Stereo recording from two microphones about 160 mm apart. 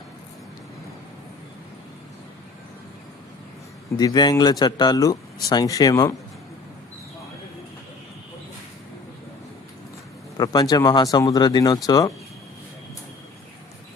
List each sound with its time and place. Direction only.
3.9 s speech: 25° left (ahead or behind)
10.3 s speech: 25° left (ahead or behind)